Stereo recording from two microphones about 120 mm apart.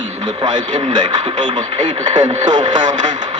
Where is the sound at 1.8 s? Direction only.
90° right.